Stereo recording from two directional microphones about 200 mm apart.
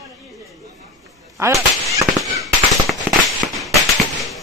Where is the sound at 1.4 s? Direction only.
15° right (ahead or behind).